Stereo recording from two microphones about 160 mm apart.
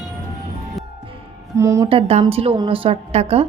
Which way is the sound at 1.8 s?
35° right (ahead or behind).